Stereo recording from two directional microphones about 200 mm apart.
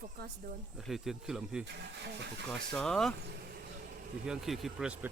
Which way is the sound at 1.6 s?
60° right (ahead or behind).